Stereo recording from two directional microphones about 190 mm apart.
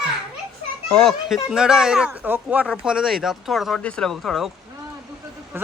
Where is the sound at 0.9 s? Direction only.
Centre (ahead or behind).